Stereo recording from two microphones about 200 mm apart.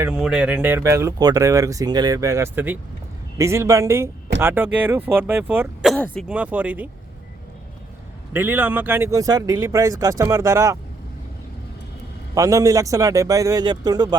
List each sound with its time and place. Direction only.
0.0 s speech: 5° right (ahead or behind)
8.3 s speech: 10° right (ahead or behind)
12.3 s speech: 15° right (ahead or behind)